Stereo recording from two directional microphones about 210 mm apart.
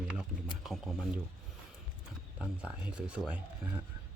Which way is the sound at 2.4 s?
5° right (ahead or behind).